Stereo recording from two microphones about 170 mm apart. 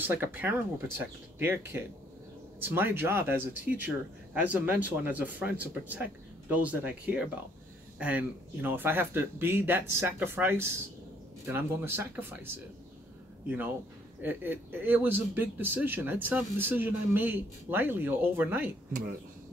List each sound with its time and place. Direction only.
0.0 s a man's voice: 10° right (ahead or behind)
2.6 s a man's voice: 10° right (ahead or behind)
14.2 s a man's voice: 10° right (ahead or behind)